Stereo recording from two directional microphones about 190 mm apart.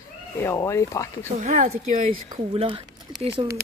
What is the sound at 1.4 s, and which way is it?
Speech, 40° right (ahead or behind).